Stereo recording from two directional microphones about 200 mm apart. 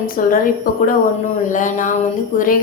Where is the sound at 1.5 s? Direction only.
40° left (ahead or behind).